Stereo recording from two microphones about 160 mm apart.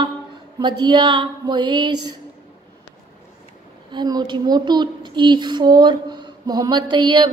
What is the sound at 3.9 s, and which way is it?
Speech, 25° right (ahead or behind).